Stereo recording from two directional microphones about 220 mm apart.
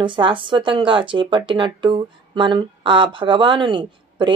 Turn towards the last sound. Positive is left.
turn(degrees=-20)  # may be behind; listen again after turning